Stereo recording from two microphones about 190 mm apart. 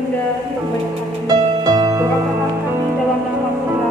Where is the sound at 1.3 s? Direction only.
20° right (ahead or behind).